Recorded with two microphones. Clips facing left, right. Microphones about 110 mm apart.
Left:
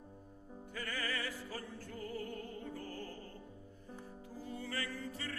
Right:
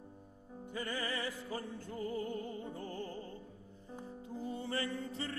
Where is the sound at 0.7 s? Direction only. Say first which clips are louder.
Right 3 dB; 20° right (ahead or behind).